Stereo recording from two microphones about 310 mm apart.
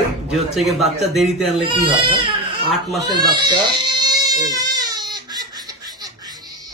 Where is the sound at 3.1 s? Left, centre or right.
Centre.